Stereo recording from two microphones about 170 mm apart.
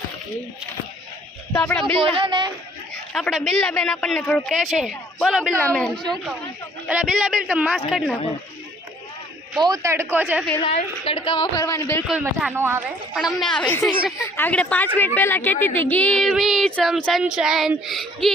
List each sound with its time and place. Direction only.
1.5 s a woman's voice: 10° left (ahead or behind)
2.0 s a woman's voice: 30° right (ahead or behind)
3.1 s speech: centre (ahead or behind)
6.8 s speech: 5° right (ahead or behind)
9.6 s speech: 20° right (ahead or behind)
10.6 s a woman's voice: 35° left (ahead or behind); by 12.0 s 15° left (ahead or behind)
12.4 s speech: 10° right (ahead or behind)
13.1 s a woman's voice: centre (ahead or behind)